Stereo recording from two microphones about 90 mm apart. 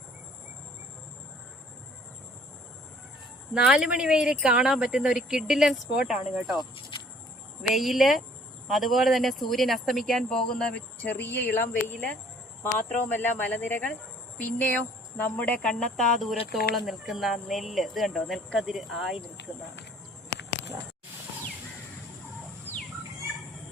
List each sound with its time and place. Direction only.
3.5 s speech: 10° right (ahead or behind)
7.7 s speech: centre (ahead or behind); by 15.7 s 15° left (ahead or behind)
15.7 s speech: 5° left (ahead or behind)